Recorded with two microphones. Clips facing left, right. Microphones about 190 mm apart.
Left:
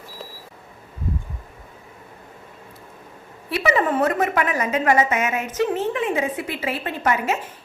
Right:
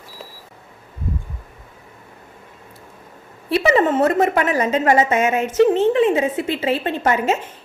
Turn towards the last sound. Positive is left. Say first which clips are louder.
# right 4 dB
turn(degrees=-25)  # may be behind; listen again after turning